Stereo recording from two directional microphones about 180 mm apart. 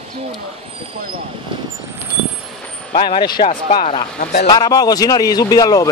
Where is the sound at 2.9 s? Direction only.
30° left (ahead or behind).